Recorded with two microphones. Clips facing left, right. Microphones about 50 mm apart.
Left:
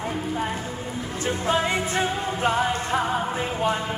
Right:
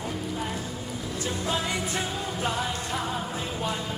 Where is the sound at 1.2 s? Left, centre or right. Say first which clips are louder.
Left 7 dB; left.